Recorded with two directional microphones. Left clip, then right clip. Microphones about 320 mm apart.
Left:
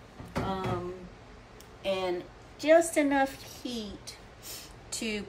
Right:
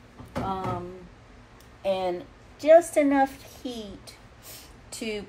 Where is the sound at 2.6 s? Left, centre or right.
Right.